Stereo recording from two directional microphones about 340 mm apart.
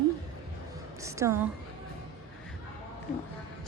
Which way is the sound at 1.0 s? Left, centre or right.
Centre.